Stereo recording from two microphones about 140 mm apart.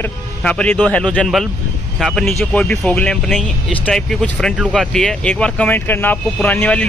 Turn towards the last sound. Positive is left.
turn(degrees=10)  # may be behind; listen again after turning